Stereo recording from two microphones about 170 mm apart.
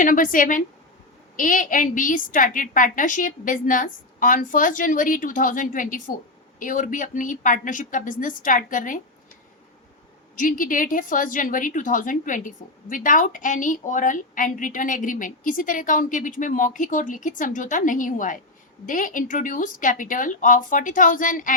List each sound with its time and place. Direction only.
0.0 s a woman's voice: 50° left (ahead or behind)
10.3 s a woman's voice: 50° left (ahead or behind)